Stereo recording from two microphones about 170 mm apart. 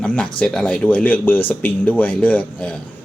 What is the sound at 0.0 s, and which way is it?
Speech, 5° left (ahead or behind).